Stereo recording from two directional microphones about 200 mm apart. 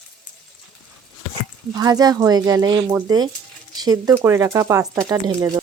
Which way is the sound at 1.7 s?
20° right (ahead or behind).